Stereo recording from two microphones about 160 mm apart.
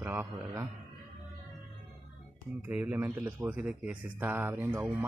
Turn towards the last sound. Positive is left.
turn(degrees=-10)  # may be behind; listen again after turning